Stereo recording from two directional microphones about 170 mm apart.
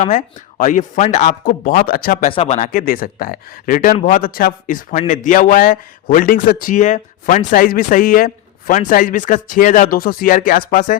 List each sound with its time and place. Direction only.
0.0 s speech: 45° left (ahead or behind)
2.3 s a man's voice: 40° left (ahead or behind)